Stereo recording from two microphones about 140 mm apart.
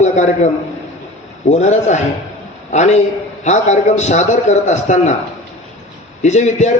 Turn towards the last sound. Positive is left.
turn(degrees=55)  # may be behind; listen again after turning